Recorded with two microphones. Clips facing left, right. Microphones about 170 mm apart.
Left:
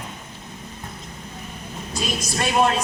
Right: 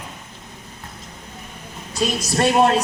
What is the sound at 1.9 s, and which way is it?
Speech, 70° right (ahead or behind).